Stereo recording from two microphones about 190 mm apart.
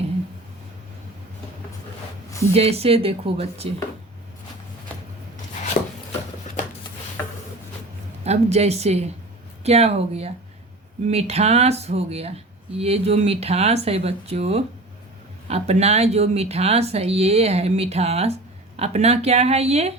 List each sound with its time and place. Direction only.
2.5 s speech: 30° right (ahead or behind)
8.2 s speech: 35° right (ahead or behind)